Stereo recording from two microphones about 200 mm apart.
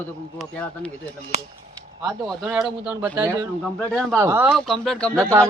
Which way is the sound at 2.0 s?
5° right (ahead or behind).